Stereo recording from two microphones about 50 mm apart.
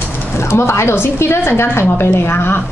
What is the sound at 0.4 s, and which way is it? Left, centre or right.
A woman's voice, left.